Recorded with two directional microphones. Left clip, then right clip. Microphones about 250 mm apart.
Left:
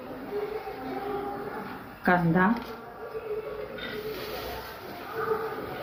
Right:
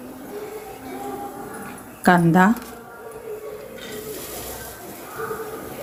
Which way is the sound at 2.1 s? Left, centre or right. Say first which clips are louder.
Right 8 dB; right.